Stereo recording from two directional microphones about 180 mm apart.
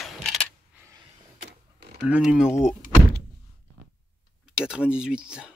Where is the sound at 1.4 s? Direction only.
60° right (ahead or behind).